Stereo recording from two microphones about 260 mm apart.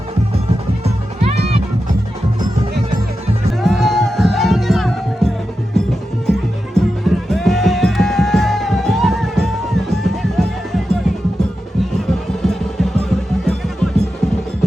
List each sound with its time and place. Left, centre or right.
1.2 s music: right
3.6 s music: centre
6.7 s music: centre
11.9 s music: centre